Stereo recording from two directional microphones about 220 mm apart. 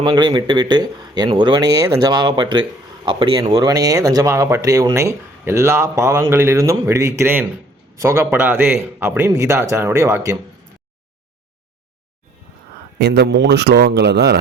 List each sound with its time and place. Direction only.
0.0 s speech: 20° right (ahead or behind)
13.0 s a man's voice: 50° right (ahead or behind)